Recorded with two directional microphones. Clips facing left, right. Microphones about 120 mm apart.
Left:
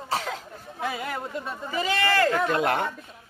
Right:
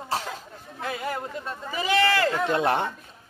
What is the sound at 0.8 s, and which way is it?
Speech, centre (ahead or behind).